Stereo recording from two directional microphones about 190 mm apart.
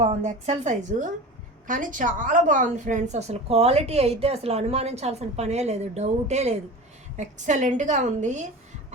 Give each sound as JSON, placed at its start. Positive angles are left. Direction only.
{"t": 0.0, "sound": "a woman's voice", "side_deg": -35}